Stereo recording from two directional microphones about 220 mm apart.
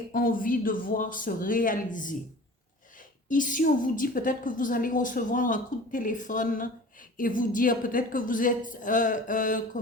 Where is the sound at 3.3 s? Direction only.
35° left (ahead or behind).